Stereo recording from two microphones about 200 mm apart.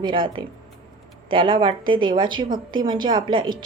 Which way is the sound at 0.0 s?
25° right (ahead or behind).